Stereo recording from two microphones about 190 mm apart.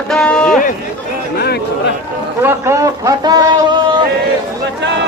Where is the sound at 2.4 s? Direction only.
15° right (ahead or behind).